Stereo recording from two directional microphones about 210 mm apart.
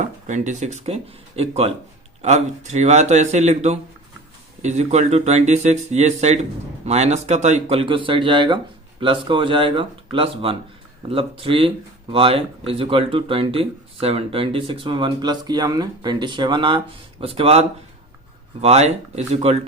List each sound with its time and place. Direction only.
0.0 s speech: 35° right (ahead or behind)